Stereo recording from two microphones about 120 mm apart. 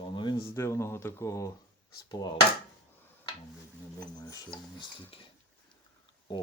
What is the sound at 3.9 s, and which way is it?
Speech, 35° left (ahead or behind).